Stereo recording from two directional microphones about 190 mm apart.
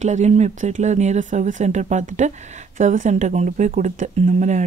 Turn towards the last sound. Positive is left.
turn(degrees=-40)  # may be behind; listen again after turning